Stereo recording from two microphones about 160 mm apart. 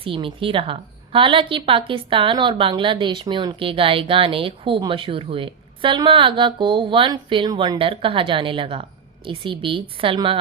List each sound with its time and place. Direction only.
0.0 s a woman's voice: 35° right (ahead or behind)